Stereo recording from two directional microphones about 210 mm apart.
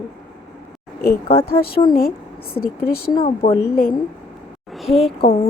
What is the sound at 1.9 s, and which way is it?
Speech, 45° left (ahead or behind).